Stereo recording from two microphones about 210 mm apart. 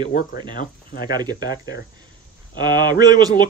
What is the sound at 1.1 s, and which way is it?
Speech, 20° right (ahead or behind).